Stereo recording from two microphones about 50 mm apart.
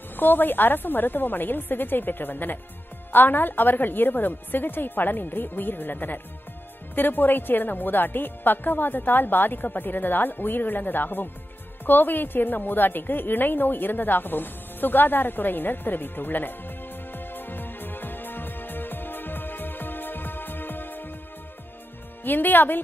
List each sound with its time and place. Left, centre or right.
0.2 s speech: left
11.8 s a sound: left
22.2 s speech: left